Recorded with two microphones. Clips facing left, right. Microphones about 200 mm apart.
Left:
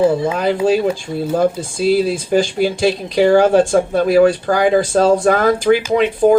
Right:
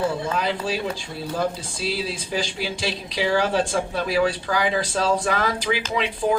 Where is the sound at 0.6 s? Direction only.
50° left (ahead or behind).